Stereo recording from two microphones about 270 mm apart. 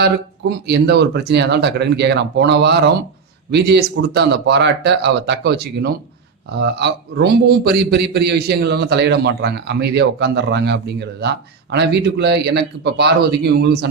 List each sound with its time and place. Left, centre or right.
0.0 s a man's voice: right